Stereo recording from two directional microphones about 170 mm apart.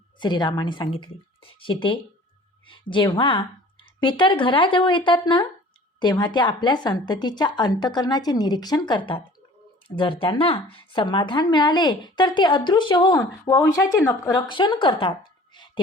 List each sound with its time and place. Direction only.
0.2 s speech: 25° left (ahead or behind)
15.5 s music: 25° left (ahead or behind)